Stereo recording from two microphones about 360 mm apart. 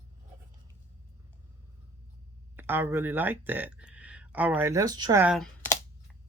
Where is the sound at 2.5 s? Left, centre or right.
Centre.